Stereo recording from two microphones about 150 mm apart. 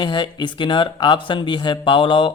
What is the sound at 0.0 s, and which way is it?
A man's voice, 30° left (ahead or behind).